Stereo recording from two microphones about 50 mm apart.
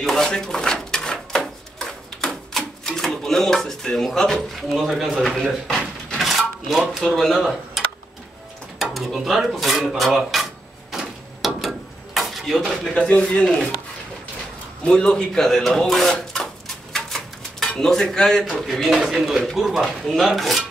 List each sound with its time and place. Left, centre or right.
0.0 s a sound: centre
3.0 s speech: centre
6.1 s a sound: centre
6.9 s speech: centre
8.9 s speech: centre
10.3 s drawer open or close: centre
10.9 s a sound: centre
12.9 s speech: centre
14.8 s speech: centre
15.4 s a sound: centre
17.7 s speech: centre
18.6 s speech: centre